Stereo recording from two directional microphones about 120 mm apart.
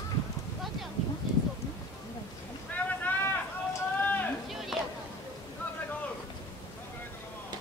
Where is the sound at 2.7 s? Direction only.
15° left (ahead or behind).